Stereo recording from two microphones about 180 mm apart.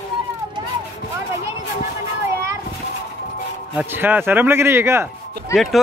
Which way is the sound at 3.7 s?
10° right (ahead or behind).